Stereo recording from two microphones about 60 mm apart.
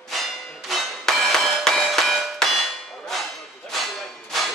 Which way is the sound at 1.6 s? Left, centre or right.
Centre.